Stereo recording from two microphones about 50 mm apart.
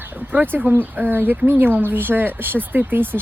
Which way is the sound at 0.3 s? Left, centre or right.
Right.